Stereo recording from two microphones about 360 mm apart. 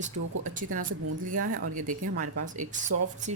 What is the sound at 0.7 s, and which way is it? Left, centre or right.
Speech, right.